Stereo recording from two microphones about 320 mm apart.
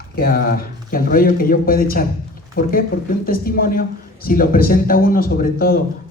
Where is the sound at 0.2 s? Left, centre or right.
Left.